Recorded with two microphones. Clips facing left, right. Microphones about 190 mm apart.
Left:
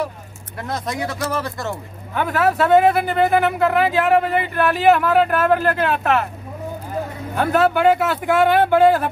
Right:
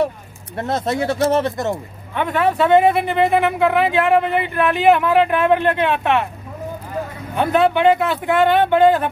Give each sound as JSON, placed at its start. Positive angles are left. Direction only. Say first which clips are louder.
{"t": 0.6, "sound": "speech", "louder": "right 5 dB", "side_deg": -25}
{"t": 2.1, "sound": "speech", "louder": "right 1 dB", "side_deg": 5}
{"t": 7.3, "sound": "speech", "louder": "right 1 dB", "side_deg": 5}